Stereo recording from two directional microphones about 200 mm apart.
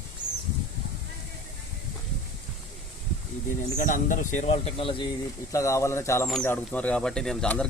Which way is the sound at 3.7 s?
40° left (ahead or behind).